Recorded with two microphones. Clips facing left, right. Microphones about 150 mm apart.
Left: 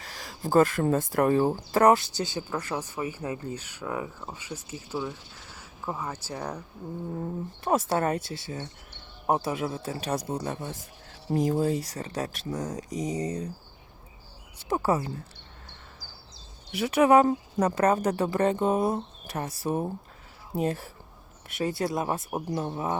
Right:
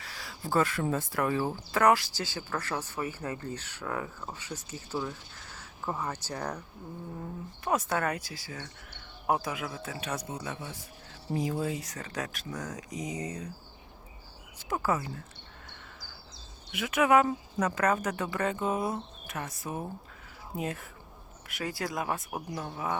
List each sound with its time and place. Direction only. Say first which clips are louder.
0.0 s speech: left 5 dB; 40° left (ahead or behind); by 6.6 s 10° left (ahead or behind)
7.6 s speech: left 4 dB; 30° left (ahead or behind)
14.7 s speech: left 4 dB; 30° left (ahead or behind)
16.7 s speech: left 4 dB; 35° left (ahead or behind)